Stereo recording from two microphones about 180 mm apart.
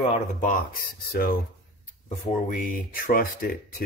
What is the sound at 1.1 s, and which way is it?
Speech, 55° left (ahead or behind).